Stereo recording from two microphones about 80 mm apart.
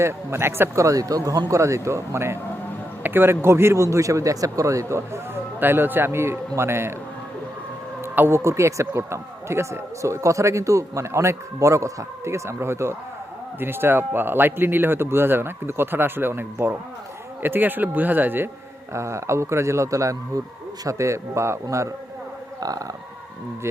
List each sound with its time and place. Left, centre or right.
0.0 s speech: right
8.0 s speech: right
18.9 s speech: right